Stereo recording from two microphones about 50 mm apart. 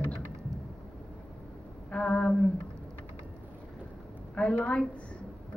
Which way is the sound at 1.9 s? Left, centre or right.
Left.